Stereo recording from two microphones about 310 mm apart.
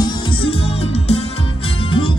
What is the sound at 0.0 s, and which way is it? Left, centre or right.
Music, centre.